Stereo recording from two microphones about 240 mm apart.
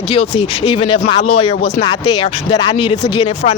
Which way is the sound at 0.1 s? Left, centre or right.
Left.